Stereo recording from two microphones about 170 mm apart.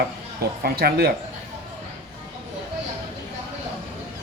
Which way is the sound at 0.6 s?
65° right (ahead or behind).